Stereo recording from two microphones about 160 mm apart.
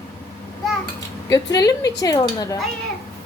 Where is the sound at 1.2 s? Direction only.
20° left (ahead or behind).